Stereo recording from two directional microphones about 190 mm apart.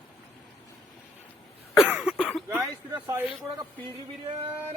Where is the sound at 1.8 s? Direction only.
5° right (ahead or behind).